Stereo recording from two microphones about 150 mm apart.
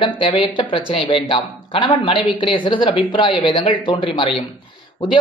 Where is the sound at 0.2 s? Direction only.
35° left (ahead or behind).